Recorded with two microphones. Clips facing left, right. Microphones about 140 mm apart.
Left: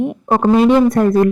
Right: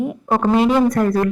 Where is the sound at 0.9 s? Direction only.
25° left (ahead or behind).